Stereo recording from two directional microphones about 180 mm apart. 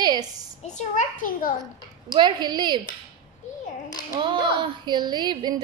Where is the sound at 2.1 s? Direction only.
25° right (ahead or behind).